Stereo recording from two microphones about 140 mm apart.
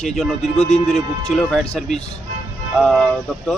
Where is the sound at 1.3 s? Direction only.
5° left (ahead or behind).